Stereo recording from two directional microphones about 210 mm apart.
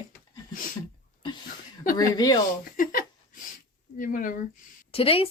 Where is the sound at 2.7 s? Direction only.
40° left (ahead or behind).